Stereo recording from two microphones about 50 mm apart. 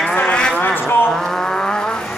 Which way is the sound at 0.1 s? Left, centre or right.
Left.